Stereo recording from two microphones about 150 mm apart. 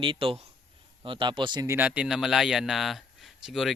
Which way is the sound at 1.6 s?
15° right (ahead or behind).